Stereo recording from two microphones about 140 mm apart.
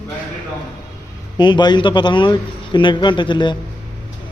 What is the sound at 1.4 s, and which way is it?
Speech, 30° left (ahead or behind).